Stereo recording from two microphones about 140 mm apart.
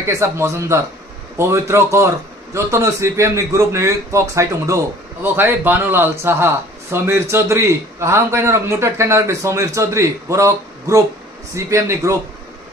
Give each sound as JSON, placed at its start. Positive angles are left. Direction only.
{"t": 0.0, "sound": "a man's voice", "side_deg": -20}